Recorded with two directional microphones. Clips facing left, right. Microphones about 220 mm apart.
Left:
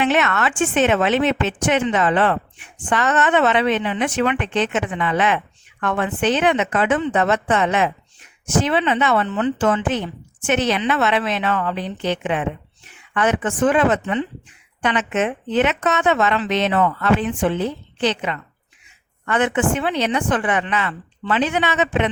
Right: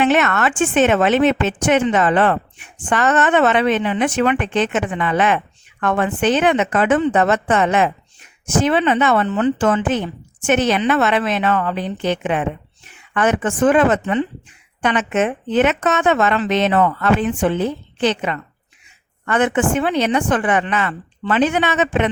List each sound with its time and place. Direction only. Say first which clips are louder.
0.0 s a woman's voice: right 3 dB; 50° right (ahead or behind)